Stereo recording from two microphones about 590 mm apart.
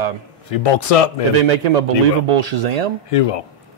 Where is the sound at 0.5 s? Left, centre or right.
Left.